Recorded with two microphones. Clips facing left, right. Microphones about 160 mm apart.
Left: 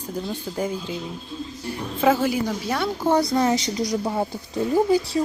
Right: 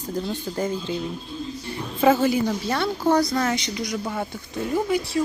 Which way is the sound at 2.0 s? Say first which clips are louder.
Right 2 dB; 5° left (ahead or behind).